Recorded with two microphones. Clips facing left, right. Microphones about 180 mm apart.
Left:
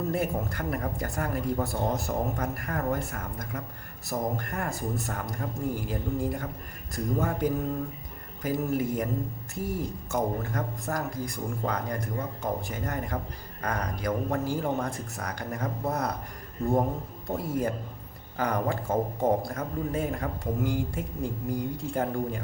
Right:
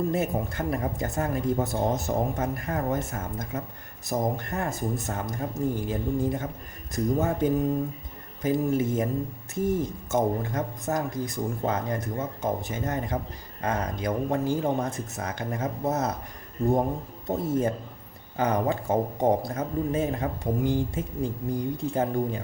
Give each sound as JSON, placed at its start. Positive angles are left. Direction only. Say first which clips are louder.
{"t": 0.1, "sound": "speech", "louder": "right 2 dB", "side_deg": -20}
{"t": 17.2, "sound": "speech", "louder": "right 4 dB", "side_deg": -20}